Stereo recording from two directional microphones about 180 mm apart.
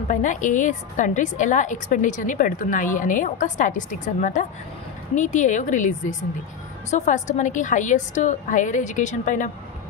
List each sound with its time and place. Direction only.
0.1 s a woman's voice: 45° left (ahead or behind)